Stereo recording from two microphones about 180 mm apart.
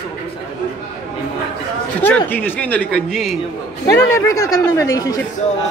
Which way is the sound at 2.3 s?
10° left (ahead or behind).